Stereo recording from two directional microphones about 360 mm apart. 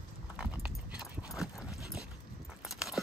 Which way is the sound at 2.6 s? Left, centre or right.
Centre.